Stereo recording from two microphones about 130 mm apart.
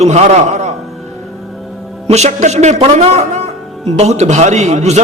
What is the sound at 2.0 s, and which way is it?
A man's voice, 60° right (ahead or behind).